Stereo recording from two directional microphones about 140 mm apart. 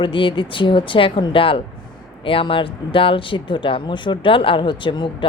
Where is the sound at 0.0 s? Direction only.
35° left (ahead or behind).